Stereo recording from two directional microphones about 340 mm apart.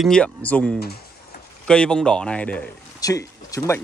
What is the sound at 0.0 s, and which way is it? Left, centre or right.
Speech, centre.